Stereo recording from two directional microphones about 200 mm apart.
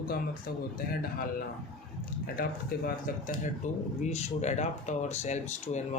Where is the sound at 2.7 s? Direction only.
45° left (ahead or behind).